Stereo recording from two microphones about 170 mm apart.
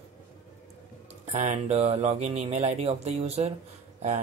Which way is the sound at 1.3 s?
40° right (ahead or behind).